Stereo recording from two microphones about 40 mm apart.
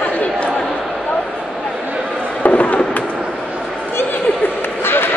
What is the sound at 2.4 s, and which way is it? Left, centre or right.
Fireworks, left.